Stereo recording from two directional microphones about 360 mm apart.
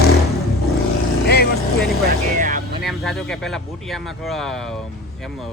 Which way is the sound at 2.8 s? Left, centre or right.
Centre.